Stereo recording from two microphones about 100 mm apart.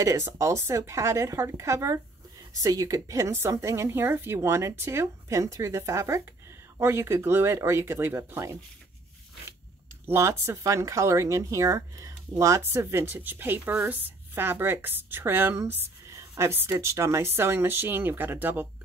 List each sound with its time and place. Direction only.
0.0 s speech: 30° right (ahead or behind)
10.0 s speech: 25° right (ahead or behind)